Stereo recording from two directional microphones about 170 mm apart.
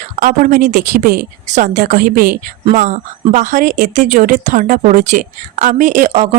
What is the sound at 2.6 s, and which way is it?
A woman's voice, 45° right (ahead or behind).